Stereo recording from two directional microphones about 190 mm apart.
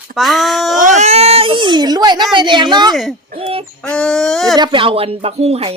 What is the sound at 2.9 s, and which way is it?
Speech, centre (ahead or behind).